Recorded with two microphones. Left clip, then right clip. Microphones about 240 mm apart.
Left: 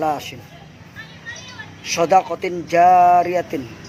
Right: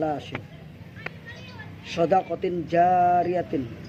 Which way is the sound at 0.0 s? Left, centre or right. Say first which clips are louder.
Left 6 dB; centre.